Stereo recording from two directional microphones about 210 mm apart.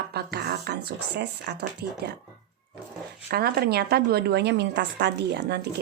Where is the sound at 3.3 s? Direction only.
50° right (ahead or behind).